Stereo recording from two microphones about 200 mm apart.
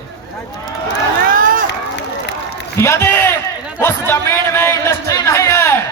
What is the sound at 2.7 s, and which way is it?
A man's voice, 15° left (ahead or behind).